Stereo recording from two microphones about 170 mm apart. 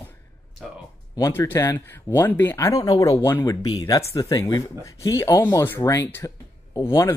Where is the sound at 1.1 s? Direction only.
20° left (ahead or behind).